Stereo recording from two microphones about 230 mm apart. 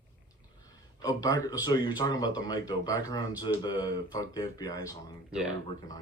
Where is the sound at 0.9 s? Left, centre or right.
Centre.